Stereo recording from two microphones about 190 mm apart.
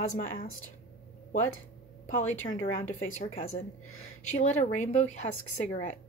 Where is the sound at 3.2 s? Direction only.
30° left (ahead or behind).